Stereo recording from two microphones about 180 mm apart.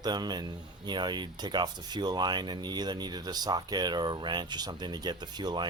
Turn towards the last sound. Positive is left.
turn(degrees=-25)  # may be behind; listen again after turning